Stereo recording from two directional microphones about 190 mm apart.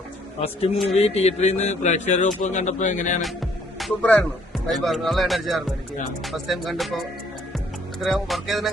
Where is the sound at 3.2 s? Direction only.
Centre (ahead or behind).